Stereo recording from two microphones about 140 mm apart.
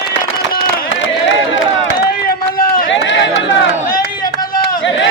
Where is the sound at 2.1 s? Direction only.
90° left.